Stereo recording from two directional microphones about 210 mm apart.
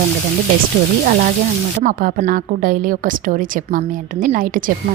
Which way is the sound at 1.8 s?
40° right (ahead or behind).